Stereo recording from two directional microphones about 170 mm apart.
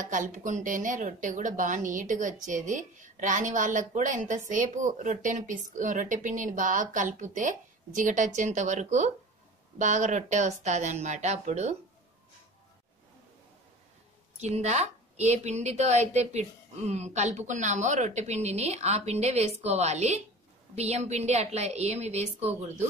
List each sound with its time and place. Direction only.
0.1 s a woman's voice: 50° right (ahead or behind)
14.4 s a woman's voice: 40° right (ahead or behind)